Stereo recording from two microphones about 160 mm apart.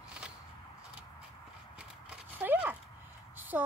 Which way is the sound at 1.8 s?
10° right (ahead or behind).